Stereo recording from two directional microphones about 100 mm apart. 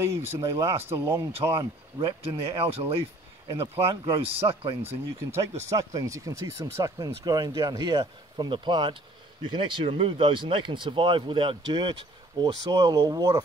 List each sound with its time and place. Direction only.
0.4 s speech: 30° right (ahead or behind)
1.6 s speech: 50° right (ahead or behind)
2.2 s speech: 70° right (ahead or behind)
3.9 s speech: 60° right (ahead or behind)
4.8 s speech: 25° right (ahead or behind); by 9.8 s 55° right (ahead or behind)
9.8 s speech: 70° right (ahead or behind); by 13.3 s 40° right (ahead or behind)